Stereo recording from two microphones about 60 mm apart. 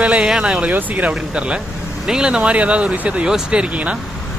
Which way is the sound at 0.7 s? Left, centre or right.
Right.